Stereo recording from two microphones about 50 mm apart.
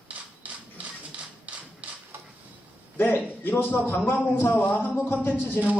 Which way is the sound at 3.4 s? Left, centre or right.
Left.